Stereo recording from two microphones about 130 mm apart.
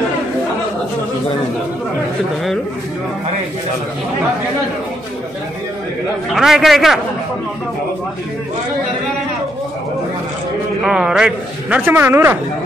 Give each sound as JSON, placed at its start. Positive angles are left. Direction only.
{"t": 6.3, "sound": "a man's voice", "side_deg": 0}
{"t": 10.8, "sound": "a man's voice", "side_deg": -5}
{"t": 11.8, "sound": "speech", "side_deg": -15}